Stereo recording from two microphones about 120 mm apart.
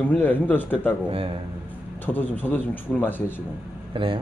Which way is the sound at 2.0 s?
15° left (ahead or behind).